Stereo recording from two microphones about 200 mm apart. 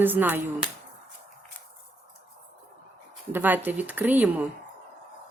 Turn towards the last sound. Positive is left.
turn(degrees=-10)  # may be behind; listen again after turning